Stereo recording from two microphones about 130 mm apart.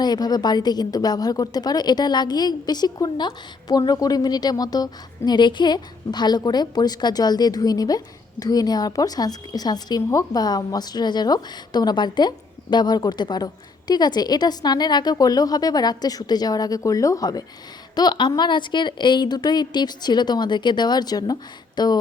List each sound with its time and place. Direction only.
0.0 s a woman's voice: 30° left (ahead or behind)